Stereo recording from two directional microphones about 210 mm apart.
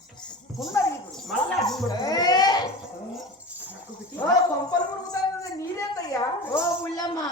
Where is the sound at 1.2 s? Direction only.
Centre (ahead or behind).